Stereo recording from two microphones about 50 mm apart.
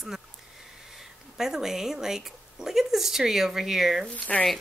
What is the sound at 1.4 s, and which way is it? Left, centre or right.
Speech, centre.